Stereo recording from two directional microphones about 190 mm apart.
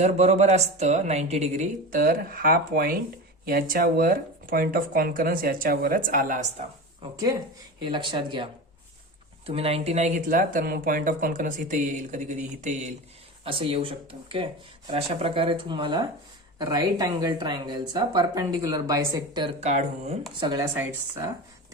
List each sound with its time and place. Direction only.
0.0 s speech: 35° right (ahead or behind)
7.9 s speech: 25° right (ahead or behind)
9.5 s speech: 30° right (ahead or behind)
13.4 s speech: 30° right (ahead or behind)
19.5 s speech: 35° right (ahead or behind)
20.4 s speech: 20° right (ahead or behind)